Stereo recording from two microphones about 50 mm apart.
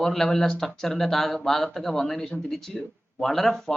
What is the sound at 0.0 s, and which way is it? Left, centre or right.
Speech, centre.